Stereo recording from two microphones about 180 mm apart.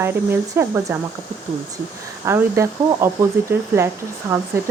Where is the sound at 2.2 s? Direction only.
15° right (ahead or behind).